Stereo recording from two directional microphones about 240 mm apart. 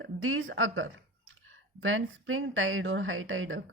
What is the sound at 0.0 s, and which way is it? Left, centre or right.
A woman's voice, right.